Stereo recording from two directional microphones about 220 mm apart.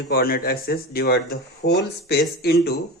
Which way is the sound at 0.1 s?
45° left (ahead or behind).